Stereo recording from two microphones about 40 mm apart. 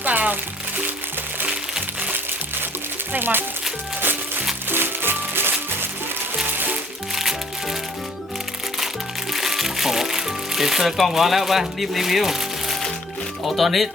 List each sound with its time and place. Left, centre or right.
0.0 s music: right
3.1 s speech: right
4.7 s music: right
6.5 s music: right
7.2 s music: centre
9.3 s music: centre
13.4 s speech: centre